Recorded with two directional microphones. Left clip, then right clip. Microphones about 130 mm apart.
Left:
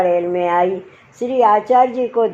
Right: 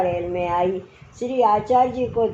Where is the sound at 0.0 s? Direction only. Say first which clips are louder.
Left 7 dB; 35° left (ahead or behind).